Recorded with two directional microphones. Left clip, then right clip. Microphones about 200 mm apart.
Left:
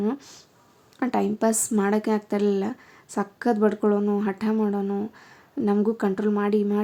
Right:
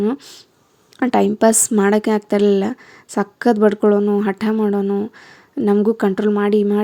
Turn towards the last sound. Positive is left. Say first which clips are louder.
# right 7 dB
turn(degrees=-35)  # may be behind; listen again after turning